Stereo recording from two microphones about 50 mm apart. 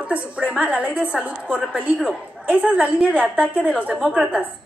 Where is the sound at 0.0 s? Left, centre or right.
Right.